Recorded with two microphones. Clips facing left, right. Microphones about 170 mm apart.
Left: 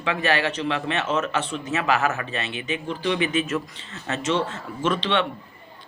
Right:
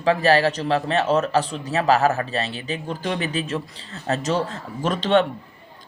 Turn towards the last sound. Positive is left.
turn(degrees=-40)  # may be behind; listen again after turning